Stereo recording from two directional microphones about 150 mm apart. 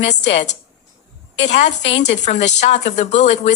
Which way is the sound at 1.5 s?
50° left (ahead or behind).